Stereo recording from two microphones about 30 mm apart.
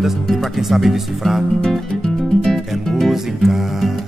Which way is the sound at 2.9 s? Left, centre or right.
Centre.